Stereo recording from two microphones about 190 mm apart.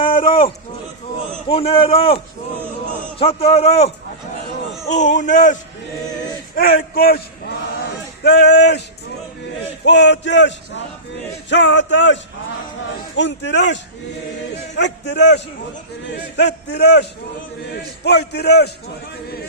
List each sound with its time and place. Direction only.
0.0 s a sound: 25° left (ahead or behind)
1.5 s a man's voice: 30° left (ahead or behind)
6.6 s a man's voice: 50° left (ahead or behind)
9.8 s a man's voice: 65° left (ahead or behind)
14.8 s a man's voice: 65° left (ahead or behind)
16.4 s a man's voice: 60° left (ahead or behind)